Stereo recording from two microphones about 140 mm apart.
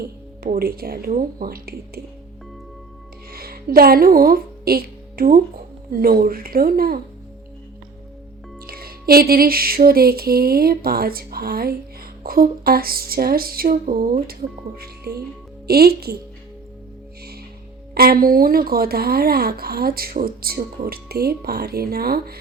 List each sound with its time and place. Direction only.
0.0 s a woman's voice: 90° right
3.3 s speech: 90° right
8.6 s a woman's voice: 90° right
15.6 s a woman's voice: 90° right
17.9 s a woman's voice: 90° right